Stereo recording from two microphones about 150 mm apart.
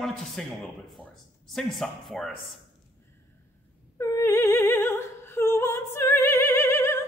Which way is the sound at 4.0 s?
20° left (ahead or behind).